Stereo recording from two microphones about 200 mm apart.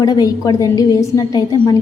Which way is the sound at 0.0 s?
20° left (ahead or behind).